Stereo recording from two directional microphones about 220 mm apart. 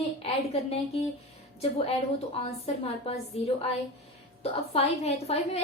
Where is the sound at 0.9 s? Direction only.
25° left (ahead or behind).